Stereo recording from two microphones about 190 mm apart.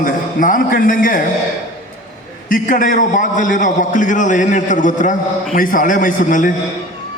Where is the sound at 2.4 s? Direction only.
45° left (ahead or behind).